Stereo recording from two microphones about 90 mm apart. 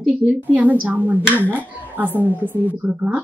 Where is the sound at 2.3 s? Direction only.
20° right (ahead or behind).